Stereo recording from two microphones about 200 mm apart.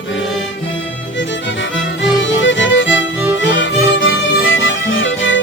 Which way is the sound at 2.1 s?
65° left (ahead or behind).